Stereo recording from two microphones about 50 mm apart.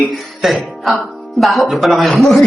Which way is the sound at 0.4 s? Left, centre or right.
Centre.